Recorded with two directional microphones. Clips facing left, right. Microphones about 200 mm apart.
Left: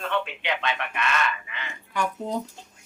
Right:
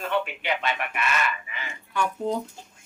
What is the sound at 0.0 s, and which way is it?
Speech, 5° right (ahead or behind).